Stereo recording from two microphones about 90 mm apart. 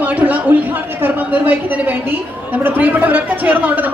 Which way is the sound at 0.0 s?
15° right (ahead or behind).